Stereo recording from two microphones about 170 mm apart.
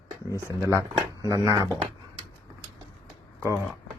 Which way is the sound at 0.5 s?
15° right (ahead or behind).